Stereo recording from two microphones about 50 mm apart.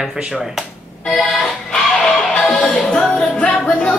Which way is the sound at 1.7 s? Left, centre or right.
Centre.